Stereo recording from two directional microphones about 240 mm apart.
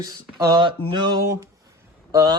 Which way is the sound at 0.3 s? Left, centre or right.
Centre.